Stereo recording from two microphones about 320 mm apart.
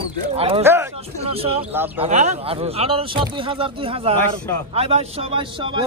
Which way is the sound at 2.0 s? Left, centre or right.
Right.